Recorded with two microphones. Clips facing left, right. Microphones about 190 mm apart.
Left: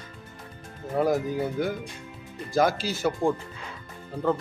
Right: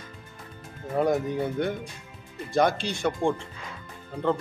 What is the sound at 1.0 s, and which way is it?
Speech, centre (ahead or behind).